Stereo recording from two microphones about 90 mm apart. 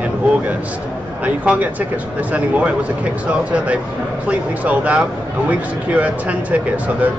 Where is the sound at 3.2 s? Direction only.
15° right (ahead or behind).